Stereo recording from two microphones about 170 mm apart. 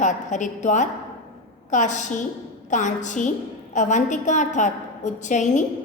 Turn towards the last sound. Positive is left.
turn(degrees=45)  # may be behind; listen again after turning